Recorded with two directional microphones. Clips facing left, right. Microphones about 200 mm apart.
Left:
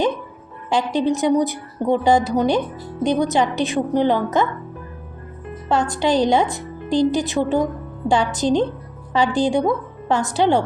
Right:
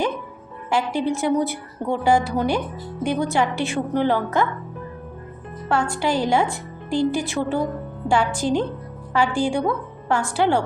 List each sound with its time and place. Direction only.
0.7 s a woman's voice: 20° left (ahead or behind)
5.6 s a woman's voice: 20° left (ahead or behind)